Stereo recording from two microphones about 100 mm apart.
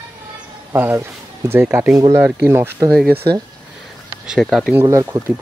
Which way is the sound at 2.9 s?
10° left (ahead or behind).